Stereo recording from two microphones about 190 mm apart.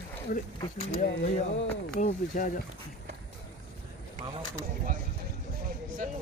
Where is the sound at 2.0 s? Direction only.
45° left (ahead or behind).